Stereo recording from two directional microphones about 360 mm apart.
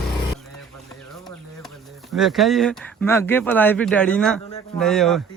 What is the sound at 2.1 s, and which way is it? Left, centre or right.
Speech, centre.